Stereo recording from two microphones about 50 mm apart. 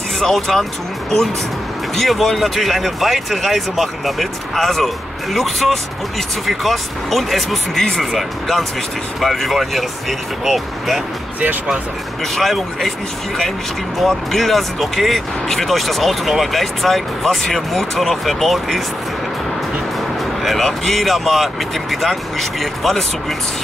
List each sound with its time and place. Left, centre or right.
0.2 s speech: centre
2.0 s speech: centre
12.4 s speech: centre
13.9 s speech: centre
20.4 s speech: centre